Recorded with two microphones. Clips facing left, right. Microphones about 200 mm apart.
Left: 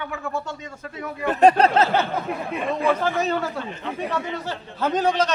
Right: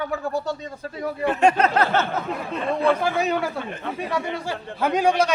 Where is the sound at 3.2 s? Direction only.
10° right (ahead or behind).